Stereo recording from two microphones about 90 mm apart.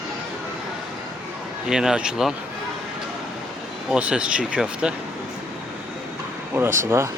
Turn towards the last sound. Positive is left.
turn(degrees=-30)  # may be behind; listen again after turning